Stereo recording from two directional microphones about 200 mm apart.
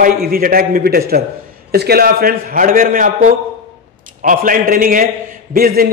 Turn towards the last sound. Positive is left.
turn(degrees=-50)  # may be behind; listen again after turning